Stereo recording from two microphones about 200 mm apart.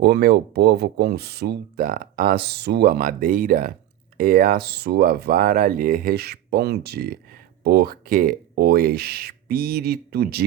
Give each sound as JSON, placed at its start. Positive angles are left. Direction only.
{"t": 0.0, "sound": "speech", "side_deg": -50}